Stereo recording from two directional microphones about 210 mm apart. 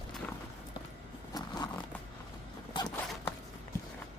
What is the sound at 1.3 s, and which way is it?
Zipper, 20° left (ahead or behind).